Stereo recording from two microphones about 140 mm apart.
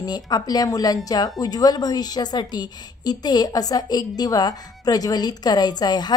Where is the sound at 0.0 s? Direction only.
30° left (ahead or behind).